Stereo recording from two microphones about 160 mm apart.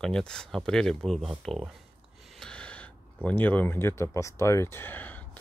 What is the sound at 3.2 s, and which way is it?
Speech, 10° left (ahead or behind).